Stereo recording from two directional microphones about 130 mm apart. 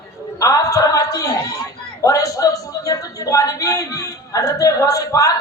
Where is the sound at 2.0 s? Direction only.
25° left (ahead or behind).